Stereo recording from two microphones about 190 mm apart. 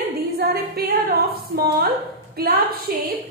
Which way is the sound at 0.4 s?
55° right (ahead or behind).